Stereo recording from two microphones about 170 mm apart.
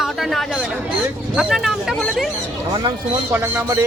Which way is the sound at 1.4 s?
Centre (ahead or behind).